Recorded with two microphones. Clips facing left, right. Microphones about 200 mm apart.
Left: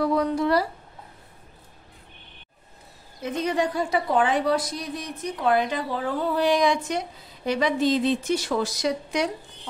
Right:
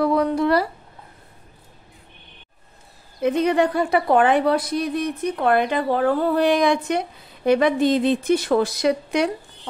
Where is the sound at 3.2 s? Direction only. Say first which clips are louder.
Right 7 dB; 60° right (ahead or behind).